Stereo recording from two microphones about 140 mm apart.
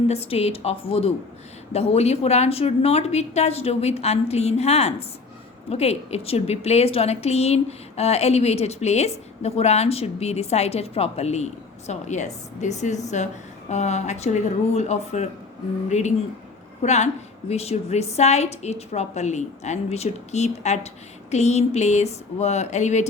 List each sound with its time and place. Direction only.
0.1 s a woman's voice: 45° left (ahead or behind)